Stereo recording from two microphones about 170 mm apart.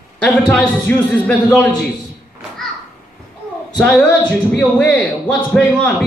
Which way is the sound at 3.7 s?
5° left (ahead or behind).